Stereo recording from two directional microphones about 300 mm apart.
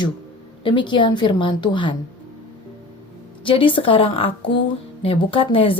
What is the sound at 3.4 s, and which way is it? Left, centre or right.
A woman's voice, centre.